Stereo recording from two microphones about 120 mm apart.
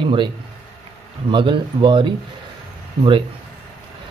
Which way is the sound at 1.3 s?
45° right (ahead or behind).